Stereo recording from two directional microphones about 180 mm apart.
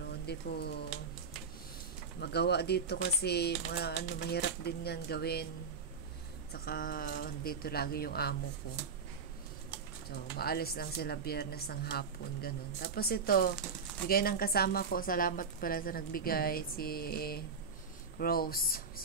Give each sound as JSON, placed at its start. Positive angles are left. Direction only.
{"t": 0.3, "sound": "a woman's voice", "side_deg": 65}
{"t": 2.1, "sound": "a woman's voice", "side_deg": 65}
{"t": 6.5, "sound": "a woman's voice", "side_deg": 55}
{"t": 10.3, "sound": "a woman's voice", "side_deg": 60}